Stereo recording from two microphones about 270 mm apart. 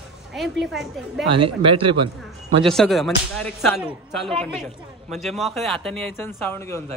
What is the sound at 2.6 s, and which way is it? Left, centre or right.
Speech, centre.